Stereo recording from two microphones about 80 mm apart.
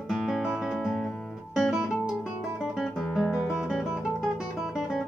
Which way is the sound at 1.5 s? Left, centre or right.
Centre.